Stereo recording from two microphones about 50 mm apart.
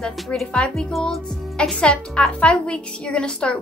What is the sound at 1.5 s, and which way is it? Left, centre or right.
Speech, centre.